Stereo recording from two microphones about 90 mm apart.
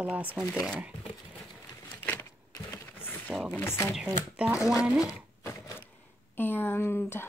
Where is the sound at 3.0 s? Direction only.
20° left (ahead or behind).